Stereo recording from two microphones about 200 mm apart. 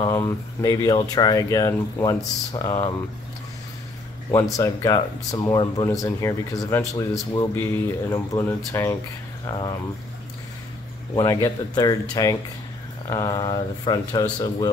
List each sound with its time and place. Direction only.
0.0 s a man's voice: 15° left (ahead or behind)
4.6 s a man's voice: 15° left (ahead or behind)
11.1 s a man's voice: 15° left (ahead or behind)